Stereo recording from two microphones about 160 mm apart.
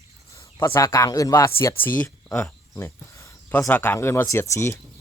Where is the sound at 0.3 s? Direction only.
20° left (ahead or behind).